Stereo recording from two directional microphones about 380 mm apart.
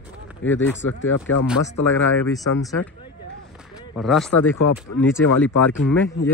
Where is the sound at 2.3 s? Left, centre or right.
Centre.